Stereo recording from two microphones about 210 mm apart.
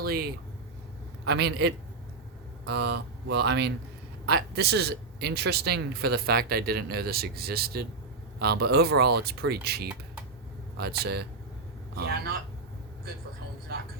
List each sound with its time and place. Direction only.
0.0 s a man's voice: 45° right (ahead or behind)